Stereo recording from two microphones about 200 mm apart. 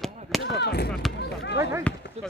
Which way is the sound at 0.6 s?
55° left (ahead or behind).